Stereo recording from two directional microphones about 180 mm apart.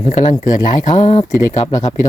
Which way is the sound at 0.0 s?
40° left (ahead or behind).